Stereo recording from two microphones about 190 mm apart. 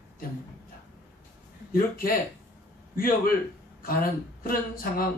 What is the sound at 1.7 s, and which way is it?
Speech, 50° left (ahead or behind).